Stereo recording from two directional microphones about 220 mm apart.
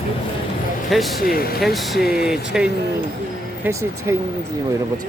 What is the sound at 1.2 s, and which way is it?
Speech, 45° left (ahead or behind).